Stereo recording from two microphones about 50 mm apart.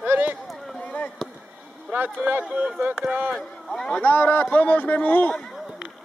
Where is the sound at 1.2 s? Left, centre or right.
Centre.